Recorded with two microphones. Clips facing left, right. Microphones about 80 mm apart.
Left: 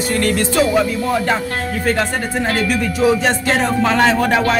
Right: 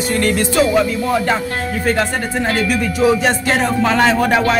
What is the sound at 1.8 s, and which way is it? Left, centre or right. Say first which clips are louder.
Speech: right 1 dB; centre.